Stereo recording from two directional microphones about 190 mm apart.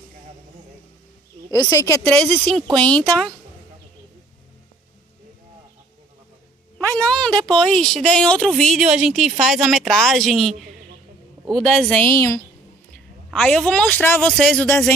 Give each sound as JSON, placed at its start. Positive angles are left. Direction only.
{"t": 1.5, "sound": "a woman's voice", "side_deg": 20}
{"t": 2.1, "sound": "speech", "side_deg": 5}
{"t": 6.8, "sound": "a sound", "side_deg": 5}
{"t": 7.4, "sound": "speech", "side_deg": 5}
{"t": 11.5, "sound": "a woman's voice", "side_deg": 5}